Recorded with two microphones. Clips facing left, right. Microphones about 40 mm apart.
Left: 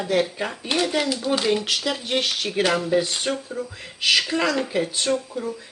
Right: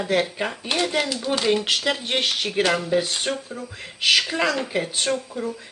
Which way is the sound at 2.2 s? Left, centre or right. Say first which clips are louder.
Right 1 dB; centre.